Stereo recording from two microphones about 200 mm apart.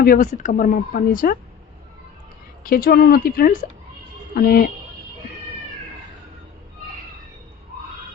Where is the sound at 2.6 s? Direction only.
50° left (ahead or behind).